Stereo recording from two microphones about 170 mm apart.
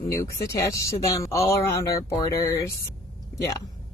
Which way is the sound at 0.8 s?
20° left (ahead or behind).